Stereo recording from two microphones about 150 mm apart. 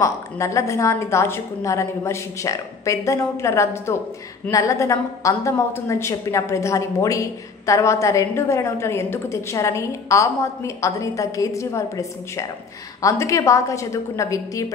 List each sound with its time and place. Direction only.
0.0 s a woman's voice: 20° left (ahead or behind)